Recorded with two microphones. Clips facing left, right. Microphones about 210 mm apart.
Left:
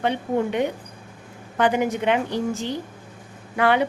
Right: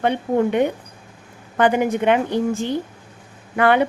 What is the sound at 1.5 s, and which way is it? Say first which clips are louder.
A woman's voice: right 3 dB; 55° right (ahead or behind).